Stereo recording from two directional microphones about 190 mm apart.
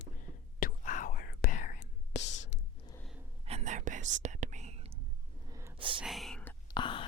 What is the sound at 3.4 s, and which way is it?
Whispering, 35° right (ahead or behind).